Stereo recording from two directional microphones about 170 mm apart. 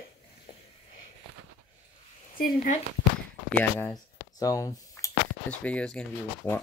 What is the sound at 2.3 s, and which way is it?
Speech, 60° left (ahead or behind).